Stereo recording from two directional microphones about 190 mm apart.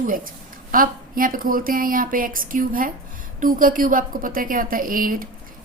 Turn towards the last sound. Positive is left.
turn(degrees=-50)  # may be behind; listen again after turning